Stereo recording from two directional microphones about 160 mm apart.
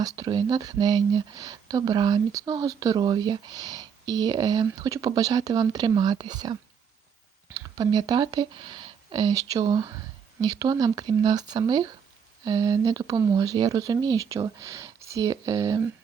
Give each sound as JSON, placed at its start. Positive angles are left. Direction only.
{"t": 0.0, "sound": "speech", "side_deg": -25}